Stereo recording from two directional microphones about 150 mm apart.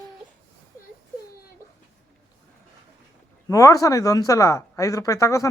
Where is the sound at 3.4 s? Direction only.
20° left (ahead or behind).